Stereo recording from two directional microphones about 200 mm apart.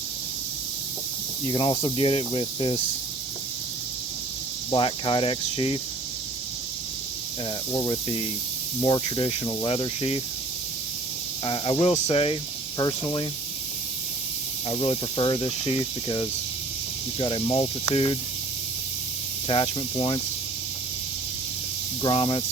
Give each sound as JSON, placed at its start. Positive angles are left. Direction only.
{"t": 1.5, "sound": "speech", "side_deg": 25}
{"t": 4.7, "sound": "speech", "side_deg": 25}
{"t": 7.7, "sound": "speech", "side_deg": 25}
{"t": 11.4, "sound": "speech", "side_deg": 25}
{"t": 14.7, "sound": "speech", "side_deg": 25}
{"t": 19.5, "sound": "speech", "side_deg": 25}
{"t": 22.0, "sound": "speech", "side_deg": 25}